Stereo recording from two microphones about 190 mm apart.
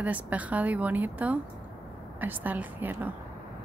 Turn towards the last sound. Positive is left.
turn(degrees=-10)  # may be behind; listen again after turning